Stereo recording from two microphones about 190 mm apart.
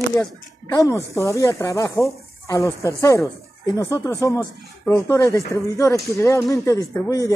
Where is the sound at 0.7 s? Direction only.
15° left (ahead or behind).